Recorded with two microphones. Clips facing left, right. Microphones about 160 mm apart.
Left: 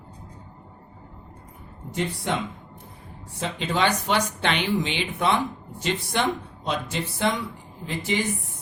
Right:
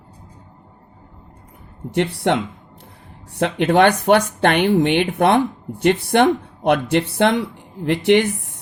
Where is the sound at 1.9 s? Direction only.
70° right (ahead or behind).